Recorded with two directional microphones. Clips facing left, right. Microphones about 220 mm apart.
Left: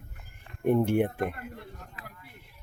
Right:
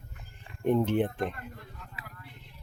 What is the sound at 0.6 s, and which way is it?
Speech, 10° left (ahead or behind).